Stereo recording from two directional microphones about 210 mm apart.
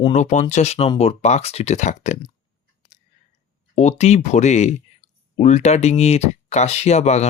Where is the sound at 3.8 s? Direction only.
30° left (ahead or behind).